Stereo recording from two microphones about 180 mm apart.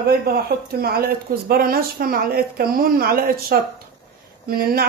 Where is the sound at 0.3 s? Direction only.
60° right (ahead or behind).